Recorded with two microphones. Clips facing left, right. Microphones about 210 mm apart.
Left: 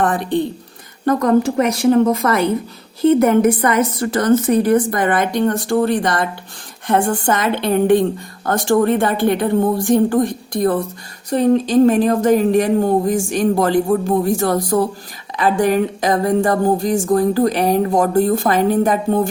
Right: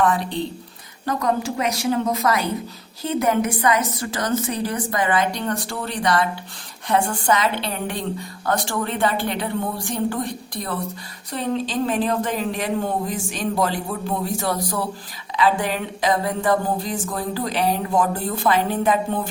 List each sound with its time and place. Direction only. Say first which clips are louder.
0.0 s speech: left 4 dB; 50° left (ahead or behind)